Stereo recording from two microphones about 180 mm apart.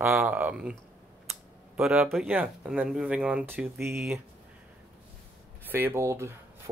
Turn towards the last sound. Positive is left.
turn(degrees=-15)  # may be behind; listen again after turning